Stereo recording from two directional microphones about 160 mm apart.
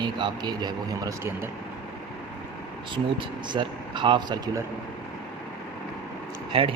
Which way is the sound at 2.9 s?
30° right (ahead or behind).